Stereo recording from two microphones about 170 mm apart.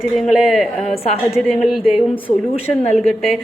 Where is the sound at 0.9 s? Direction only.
35° left (ahead or behind).